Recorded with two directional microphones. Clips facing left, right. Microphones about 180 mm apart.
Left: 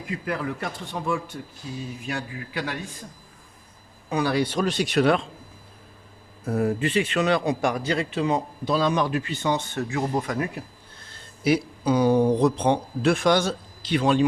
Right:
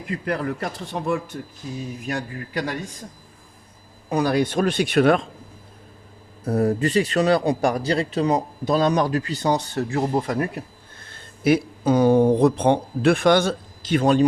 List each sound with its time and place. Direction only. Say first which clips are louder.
0.3 s speech: right 4 dB; 40° right (ahead or behind)
4.2 s speech: right 3 dB; 45° right (ahead or behind)
6.4 s speech: right 3 dB; 35° right (ahead or behind)
11.1 s speech: right 3 dB; 55° right (ahead or behind)